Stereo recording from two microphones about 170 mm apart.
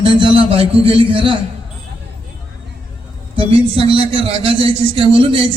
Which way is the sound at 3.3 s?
30° right (ahead or behind).